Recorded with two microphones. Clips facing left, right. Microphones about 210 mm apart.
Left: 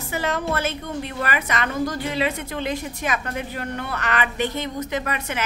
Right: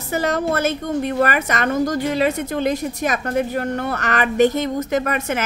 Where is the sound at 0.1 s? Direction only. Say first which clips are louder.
Right 5 dB; 40° right (ahead or behind).